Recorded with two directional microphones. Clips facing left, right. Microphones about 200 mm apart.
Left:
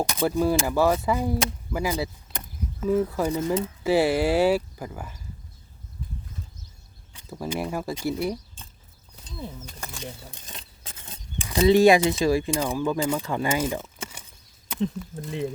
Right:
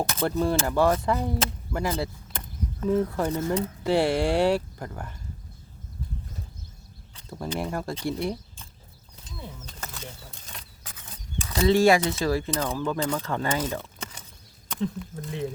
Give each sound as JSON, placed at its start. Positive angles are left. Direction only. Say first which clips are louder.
{"t": 0.0, "sound": "speech", "louder": "left 2 dB", "side_deg": 15}
{"t": 3.8, "sound": "speech", "louder": "left 2 dB", "side_deg": 5}
{"t": 7.1, "sound": "speech", "louder": "left 1 dB", "side_deg": 5}
{"t": 9.6, "sound": "a sound", "louder": "left 3 dB", "side_deg": 15}
{"t": 11.4, "sound": "speech", "louder": "left 3 dB", "side_deg": 15}